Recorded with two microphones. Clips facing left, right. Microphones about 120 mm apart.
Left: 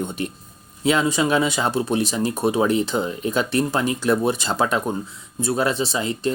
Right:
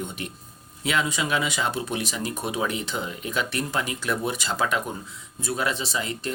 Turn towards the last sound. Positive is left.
turn(degrees=30)  # may be behind; listen again after turning